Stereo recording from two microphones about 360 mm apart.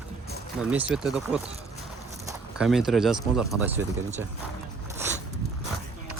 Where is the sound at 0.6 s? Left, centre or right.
Centre.